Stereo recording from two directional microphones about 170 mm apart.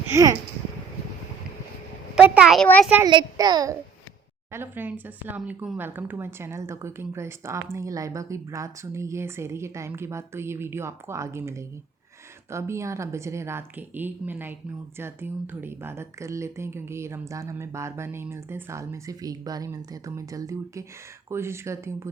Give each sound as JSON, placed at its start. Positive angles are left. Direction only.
{"t": 0.1, "sound": "a child's voice", "side_deg": -20}
{"t": 2.1, "sound": "a child's voice", "side_deg": -5}
{"t": 3.1, "sound": "a child's voice", "side_deg": -25}